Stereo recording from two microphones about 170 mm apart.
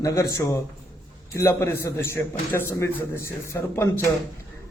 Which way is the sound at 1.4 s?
15° left (ahead or behind).